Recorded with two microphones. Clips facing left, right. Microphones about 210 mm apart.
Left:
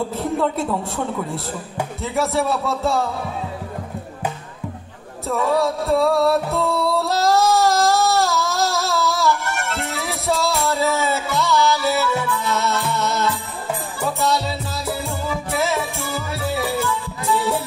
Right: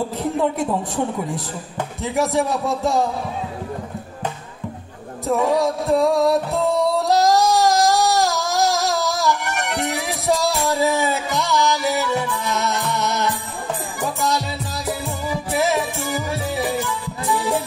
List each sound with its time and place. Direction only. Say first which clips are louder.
0.2 s a man's voice: right 1 dB; 15° right (ahead or behind)
5.3 s music: right 1 dB; 15° right (ahead or behind)
14.9 s music: even; 15° right (ahead or behind)